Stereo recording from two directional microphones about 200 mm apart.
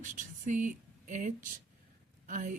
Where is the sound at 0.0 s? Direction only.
40° right (ahead or behind).